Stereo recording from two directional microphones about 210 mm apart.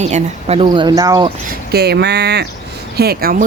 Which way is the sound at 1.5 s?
50° right (ahead or behind).